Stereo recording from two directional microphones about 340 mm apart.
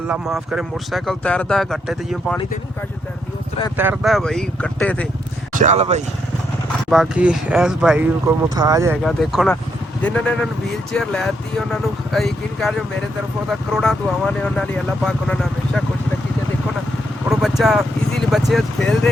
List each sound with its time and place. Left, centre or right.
0.1 s speech: centre
3.8 s speech: centre
5.5 s speech: centre
6.9 s speech: centre
17.2 s vehicle: centre
18.3 s speech: centre